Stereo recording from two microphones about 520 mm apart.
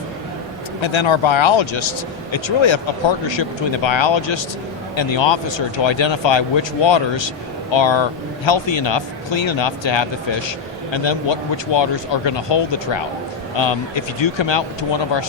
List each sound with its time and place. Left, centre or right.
0.8 s speech: left